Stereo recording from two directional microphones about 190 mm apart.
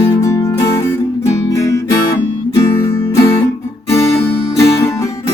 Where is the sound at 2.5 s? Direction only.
20° left (ahead or behind).